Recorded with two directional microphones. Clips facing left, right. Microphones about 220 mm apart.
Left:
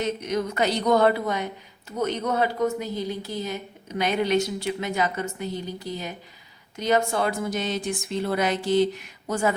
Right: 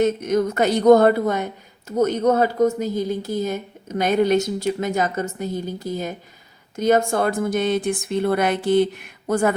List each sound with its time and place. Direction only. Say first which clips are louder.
0.0 s a woman's voice: right 7 dB; 50° right (ahead or behind)